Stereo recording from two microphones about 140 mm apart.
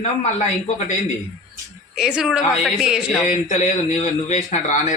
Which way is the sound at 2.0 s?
5° right (ahead or behind).